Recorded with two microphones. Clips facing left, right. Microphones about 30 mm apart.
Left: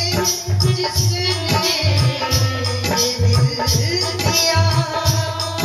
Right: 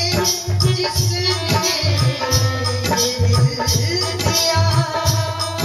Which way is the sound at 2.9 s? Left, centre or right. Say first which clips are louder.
Even; left.